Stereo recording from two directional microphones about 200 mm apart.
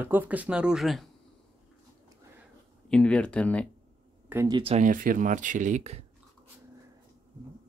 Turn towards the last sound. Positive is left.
turn(degrees=-35)  # may be behind; listen again after turning